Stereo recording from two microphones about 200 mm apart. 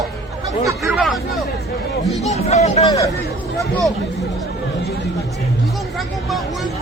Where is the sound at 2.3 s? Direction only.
35° left (ahead or behind).